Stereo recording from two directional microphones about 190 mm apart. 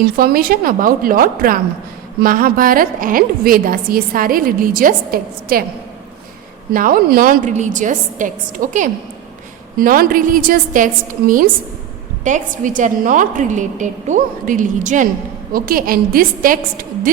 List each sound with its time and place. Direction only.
0.0 s a woman's voice: 50° right (ahead or behind)
6.7 s a woman's voice: 50° right (ahead or behind)